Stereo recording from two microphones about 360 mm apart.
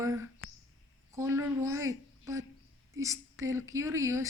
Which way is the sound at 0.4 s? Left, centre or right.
Left.